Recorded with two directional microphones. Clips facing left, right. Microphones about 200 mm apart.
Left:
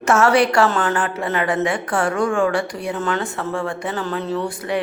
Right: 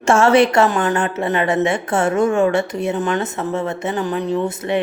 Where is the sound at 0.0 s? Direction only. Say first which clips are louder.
Right 3 dB; 25° right (ahead or behind).